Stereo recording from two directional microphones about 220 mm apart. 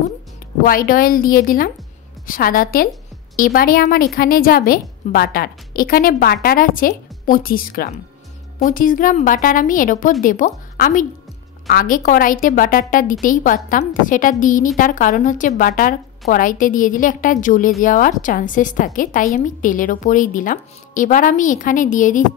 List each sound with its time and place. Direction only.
0.7 s a woman's voice: 40° left (ahead or behind)